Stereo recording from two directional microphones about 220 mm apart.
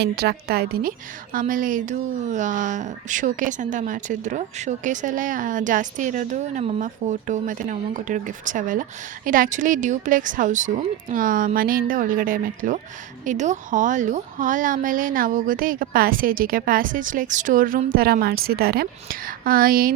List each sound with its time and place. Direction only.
0.0 s a woman's voice: 45° right (ahead or behind)